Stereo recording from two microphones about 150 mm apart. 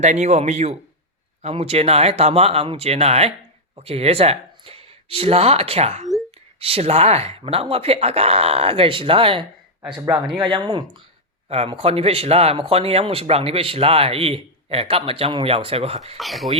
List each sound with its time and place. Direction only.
0.0 s a man's voice: 50° right (ahead or behind)
16.1 s speech: centre (ahead or behind)